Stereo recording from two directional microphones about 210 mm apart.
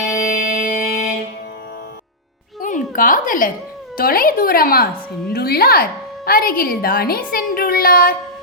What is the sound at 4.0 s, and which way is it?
A woman's voice, 45° left (ahead or behind).